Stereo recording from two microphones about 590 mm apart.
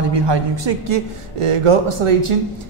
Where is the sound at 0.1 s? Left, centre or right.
Right.